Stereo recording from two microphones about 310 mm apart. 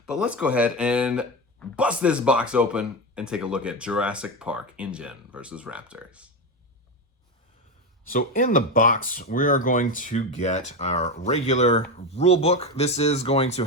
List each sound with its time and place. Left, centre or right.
0.0 s speech: centre
8.0 s speech: left